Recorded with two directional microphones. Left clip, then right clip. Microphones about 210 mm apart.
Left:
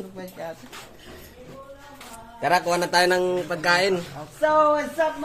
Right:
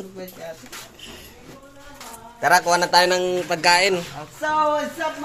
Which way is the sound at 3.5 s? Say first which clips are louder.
Right 5 dB; 5° right (ahead or behind).